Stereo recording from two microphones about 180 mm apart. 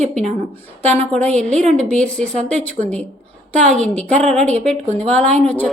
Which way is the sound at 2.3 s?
40° right (ahead or behind).